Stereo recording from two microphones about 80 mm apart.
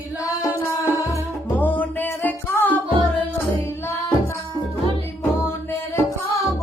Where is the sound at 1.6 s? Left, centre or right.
Left.